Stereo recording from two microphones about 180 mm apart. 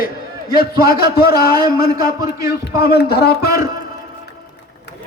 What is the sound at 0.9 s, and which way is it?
Speech, 60° left (ahead or behind).